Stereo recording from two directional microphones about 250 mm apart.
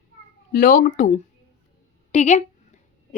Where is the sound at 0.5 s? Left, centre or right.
Left.